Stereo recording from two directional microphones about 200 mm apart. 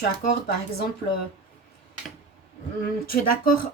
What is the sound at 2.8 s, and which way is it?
Speech, 45° left (ahead or behind).